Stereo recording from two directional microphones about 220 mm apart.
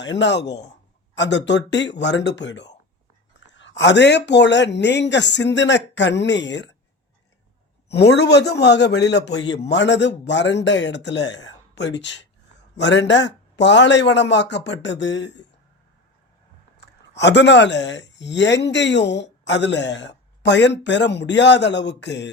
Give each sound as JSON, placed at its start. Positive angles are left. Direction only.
{"t": 0.0, "sound": "speech", "side_deg": 55}
{"t": 7.9, "sound": "speech", "side_deg": 50}
{"t": 16.7, "sound": "speech", "side_deg": 50}